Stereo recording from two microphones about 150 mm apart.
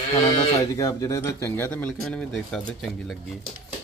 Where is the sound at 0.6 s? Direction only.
25° left (ahead or behind); by 3.5 s centre (ahead or behind).